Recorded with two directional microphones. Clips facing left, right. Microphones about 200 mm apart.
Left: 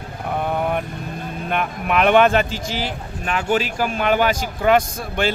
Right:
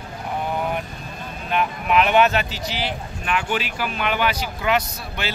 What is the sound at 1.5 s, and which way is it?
Speech, 50° left (ahead or behind).